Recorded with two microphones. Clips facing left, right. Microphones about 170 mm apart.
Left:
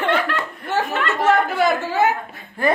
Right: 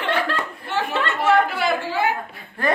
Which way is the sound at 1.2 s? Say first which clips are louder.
Left 2 dB; 45° left (ahead or behind).